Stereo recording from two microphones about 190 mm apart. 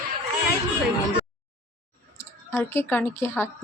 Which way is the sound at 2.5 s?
10° left (ahead or behind).